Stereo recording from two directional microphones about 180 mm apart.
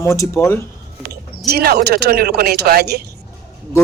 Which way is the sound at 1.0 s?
60° right (ahead or behind).